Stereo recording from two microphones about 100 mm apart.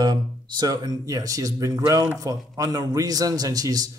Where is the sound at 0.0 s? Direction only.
45° right (ahead or behind).